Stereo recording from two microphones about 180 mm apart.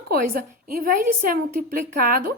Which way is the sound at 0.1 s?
55° right (ahead or behind).